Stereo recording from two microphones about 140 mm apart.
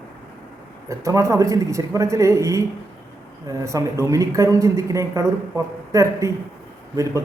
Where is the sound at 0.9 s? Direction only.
25° right (ahead or behind).